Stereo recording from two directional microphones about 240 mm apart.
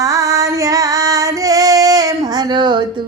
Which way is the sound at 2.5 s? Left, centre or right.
Centre.